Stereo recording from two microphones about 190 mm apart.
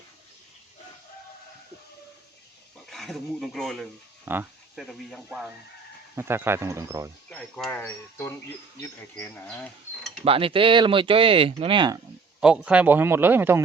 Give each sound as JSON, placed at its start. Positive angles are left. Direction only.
{"t": 2.8, "sound": "speech", "side_deg": 0}
{"t": 4.3, "sound": "a sound", "side_deg": -10}
{"t": 4.8, "sound": "speech", "side_deg": 0}
{"t": 6.1, "sound": "a man's voice", "side_deg": -15}
{"t": 7.3, "sound": "mechanisms", "side_deg": 5}
{"t": 10.2, "sound": "speech", "side_deg": -30}
{"t": 12.4, "sound": "a man's voice", "side_deg": -5}